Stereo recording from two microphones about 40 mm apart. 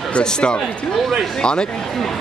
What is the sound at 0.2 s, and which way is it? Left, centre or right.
Speech, left.